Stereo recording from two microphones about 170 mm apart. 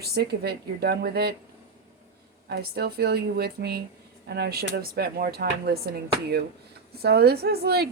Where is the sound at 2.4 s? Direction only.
70° right (ahead or behind).